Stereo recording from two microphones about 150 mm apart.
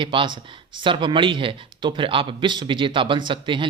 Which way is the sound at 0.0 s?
35° right (ahead or behind).